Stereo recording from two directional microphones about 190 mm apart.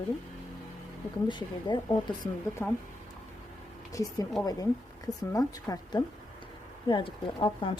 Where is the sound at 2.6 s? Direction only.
5° left (ahead or behind).